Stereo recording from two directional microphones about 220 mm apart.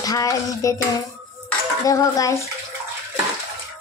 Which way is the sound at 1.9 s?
15° left (ahead or behind).